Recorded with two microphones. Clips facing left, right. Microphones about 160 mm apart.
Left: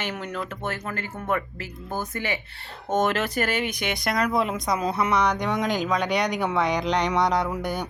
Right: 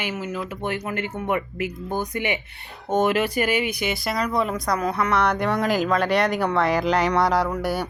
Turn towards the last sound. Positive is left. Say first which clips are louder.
# right 3 dB
turn(degrees=-5)  # may be behind; listen again after turning